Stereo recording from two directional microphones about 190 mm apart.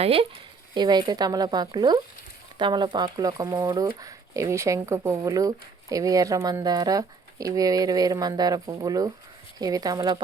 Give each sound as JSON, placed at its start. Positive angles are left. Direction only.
{"t": 0.0, "sound": "speech", "side_deg": -30}